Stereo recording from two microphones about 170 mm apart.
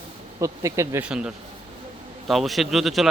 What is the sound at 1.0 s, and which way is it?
Speech, 5° right (ahead or behind).